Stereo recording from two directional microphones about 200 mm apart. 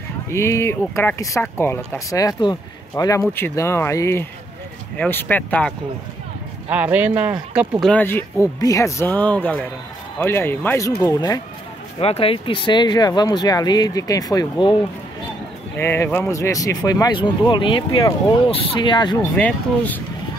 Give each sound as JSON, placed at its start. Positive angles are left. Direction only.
{"t": 0.3, "sound": "speech", "side_deg": 15}
{"t": 6.7, "sound": "speech", "side_deg": -10}
{"t": 7.8, "sound": "speech", "side_deg": 10}
{"t": 12.0, "sound": "speech", "side_deg": 30}
{"t": 19.3, "sound": "speech", "side_deg": 5}